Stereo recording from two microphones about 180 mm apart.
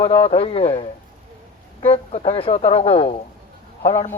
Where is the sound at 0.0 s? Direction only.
30° left (ahead or behind).